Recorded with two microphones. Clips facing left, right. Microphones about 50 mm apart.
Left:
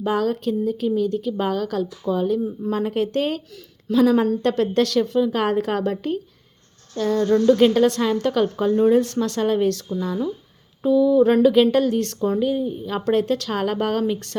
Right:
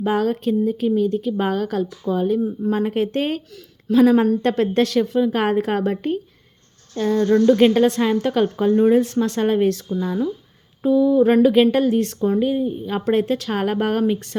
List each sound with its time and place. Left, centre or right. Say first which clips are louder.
0.0 s a woman's voice: right 2 dB; right
10.8 s a sound: even; right
11.4 s a woman's voice: right 1 dB; right